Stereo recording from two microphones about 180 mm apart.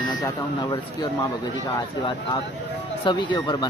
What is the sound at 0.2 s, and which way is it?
Speech, 25° left (ahead or behind).